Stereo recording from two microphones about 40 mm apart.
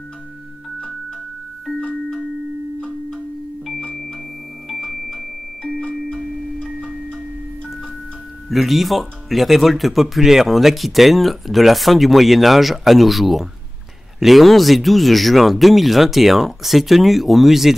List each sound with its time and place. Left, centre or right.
4.6 s tuning fork: centre
5.8 s music: centre
6.6 s music: right
8.5 s speech: centre